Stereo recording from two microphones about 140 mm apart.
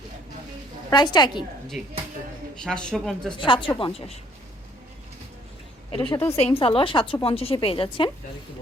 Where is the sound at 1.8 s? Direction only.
5° right (ahead or behind).